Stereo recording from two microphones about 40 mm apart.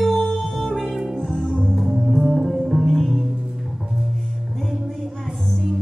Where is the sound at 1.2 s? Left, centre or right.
Centre.